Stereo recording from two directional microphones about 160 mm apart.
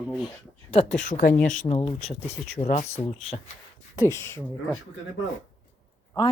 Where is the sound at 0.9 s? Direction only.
55° left (ahead or behind).